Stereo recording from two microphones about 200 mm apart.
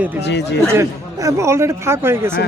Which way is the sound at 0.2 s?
60° left (ahead or behind).